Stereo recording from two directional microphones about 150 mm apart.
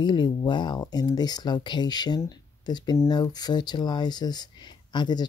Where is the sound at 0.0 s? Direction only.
30° left (ahead or behind).